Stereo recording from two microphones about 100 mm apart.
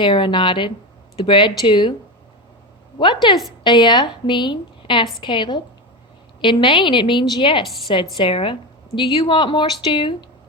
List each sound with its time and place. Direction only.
0.0 s a woman's voice: 55° left (ahead or behind)
3.0 s a woman's voice: 50° left (ahead or behind)